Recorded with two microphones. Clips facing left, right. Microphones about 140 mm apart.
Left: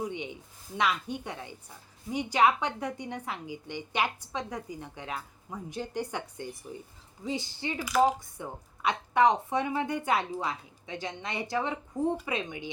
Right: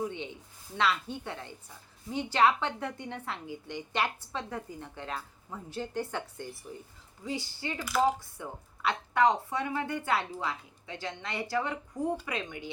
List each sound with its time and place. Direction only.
0.0 s a woman's voice: 15° left (ahead or behind)